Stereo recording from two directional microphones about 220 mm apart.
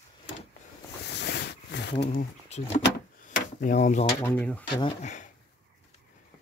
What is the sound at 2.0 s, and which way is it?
Speech, 30° left (ahead or behind).